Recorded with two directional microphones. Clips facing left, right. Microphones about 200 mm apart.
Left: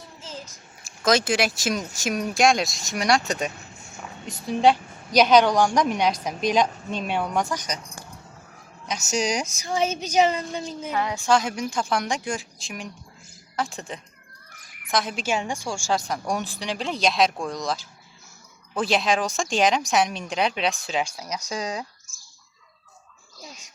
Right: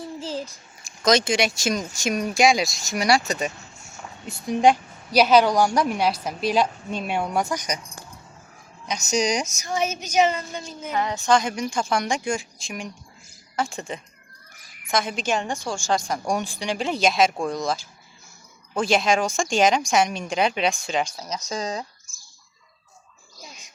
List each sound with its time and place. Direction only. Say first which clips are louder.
0.2 s a child's voice: right 5 dB; 30° right (ahead or behind)
1.0 s a woman's voice: right 1 dB; 5° left (ahead or behind); by 7.8 s 10° right (ahead or behind)
8.9 s a woman's voice: right 2 dB; 5° left (ahead or behind)
9.5 s child singing: left 1 dB; 30° left (ahead or behind)
10.9 s a woman's voice: right 1 dB; 5° left (ahead or behind)